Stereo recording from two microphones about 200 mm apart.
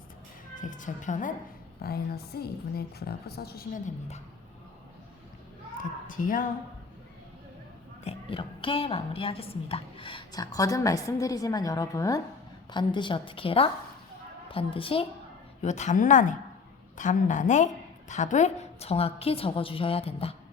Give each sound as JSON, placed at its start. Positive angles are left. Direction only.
{"t": 0.6, "sound": "speech", "side_deg": 40}
{"t": 1.8, "sound": "a woman's voice", "side_deg": 50}
{"t": 6.1, "sound": "a woman's voice", "side_deg": 45}
{"t": 8.0, "sound": "a woman's voice", "side_deg": 30}